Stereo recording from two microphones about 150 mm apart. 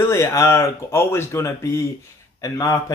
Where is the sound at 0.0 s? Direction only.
20° left (ahead or behind).